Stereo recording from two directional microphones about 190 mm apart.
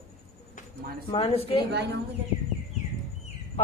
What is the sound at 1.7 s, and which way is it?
Speech, 60° right (ahead or behind).